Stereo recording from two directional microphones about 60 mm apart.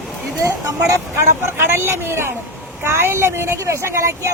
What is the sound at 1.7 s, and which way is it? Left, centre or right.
Speech, right.